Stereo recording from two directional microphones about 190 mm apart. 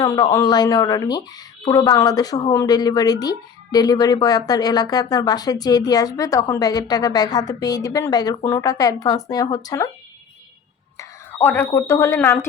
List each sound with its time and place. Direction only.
0.0 s speech: 15° left (ahead or behind)
10.9 s speech: 10° left (ahead or behind)